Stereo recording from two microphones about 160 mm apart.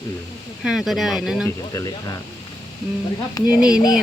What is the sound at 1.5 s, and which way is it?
Speech, 20° left (ahead or behind).